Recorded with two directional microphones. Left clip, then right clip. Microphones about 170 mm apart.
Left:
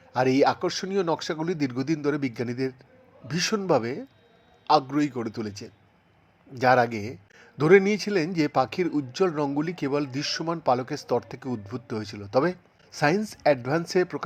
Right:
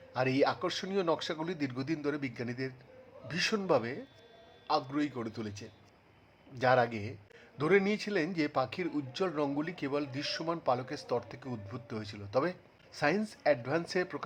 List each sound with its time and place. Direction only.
0.1 s a man's voice: 30° left (ahead or behind)